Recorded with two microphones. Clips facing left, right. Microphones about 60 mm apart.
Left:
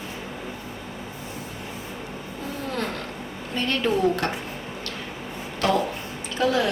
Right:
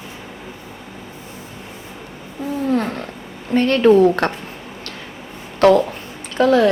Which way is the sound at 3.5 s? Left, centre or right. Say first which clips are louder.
Right 12 dB; right.